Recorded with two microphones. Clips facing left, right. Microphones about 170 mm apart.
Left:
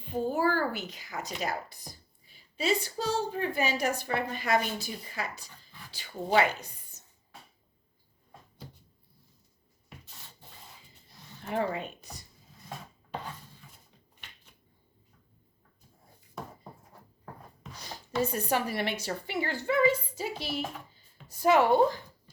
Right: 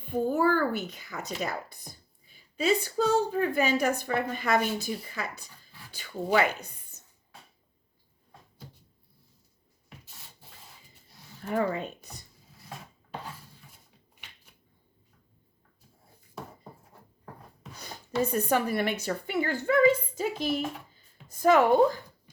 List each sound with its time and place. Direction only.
0.0 s a child's voice: 50° right (ahead or behind)
2.3 s a woman's voice: 55° right (ahead or behind)
11.5 s speech: 40° right (ahead or behind)
17.7 s a woman's voice: 55° right (ahead or behind)
20.9 s writing: 45° right (ahead or behind)